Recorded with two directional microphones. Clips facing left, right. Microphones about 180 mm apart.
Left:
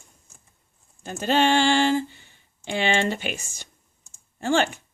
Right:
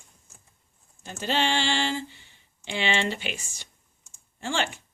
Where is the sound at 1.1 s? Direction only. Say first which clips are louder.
Left 6 dB; 50° left (ahead or behind).